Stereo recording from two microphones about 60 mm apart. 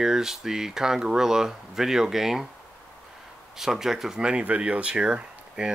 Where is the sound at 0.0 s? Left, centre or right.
Centre.